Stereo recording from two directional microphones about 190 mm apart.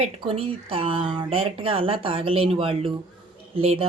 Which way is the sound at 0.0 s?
30° right (ahead or behind).